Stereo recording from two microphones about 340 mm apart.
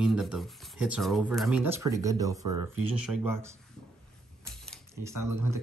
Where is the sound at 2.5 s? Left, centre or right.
Right.